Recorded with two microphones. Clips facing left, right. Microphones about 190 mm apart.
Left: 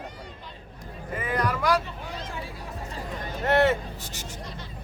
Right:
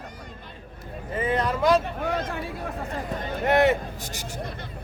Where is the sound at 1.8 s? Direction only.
60° right (ahead or behind).